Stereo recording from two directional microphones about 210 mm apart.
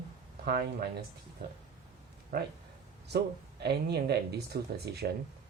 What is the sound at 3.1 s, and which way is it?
Speech, 50° right (ahead or behind).